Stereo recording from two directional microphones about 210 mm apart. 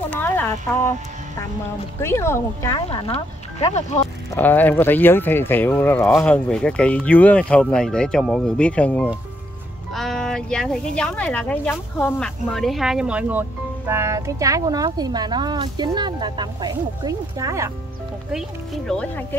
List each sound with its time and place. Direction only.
0.1 s speech: 10° left (ahead or behind)
2.0 s speech: 10° left (ahead or behind)
2.9 s speech: 30° left (ahead or behind)
4.3 s speech: 10° left (ahead or behind); by 17.6 s 15° right (ahead or behind)
18.3 s speech: centre (ahead or behind)